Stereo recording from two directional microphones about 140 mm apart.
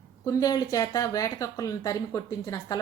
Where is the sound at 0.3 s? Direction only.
25° left (ahead or behind).